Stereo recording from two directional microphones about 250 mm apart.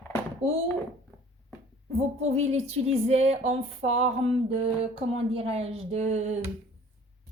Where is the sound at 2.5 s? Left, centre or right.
Right.